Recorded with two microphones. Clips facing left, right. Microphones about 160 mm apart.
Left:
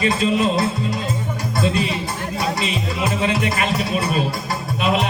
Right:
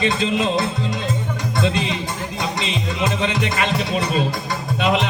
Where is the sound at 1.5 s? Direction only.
25° right (ahead or behind).